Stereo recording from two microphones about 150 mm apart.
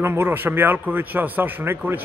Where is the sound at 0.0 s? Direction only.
15° right (ahead or behind).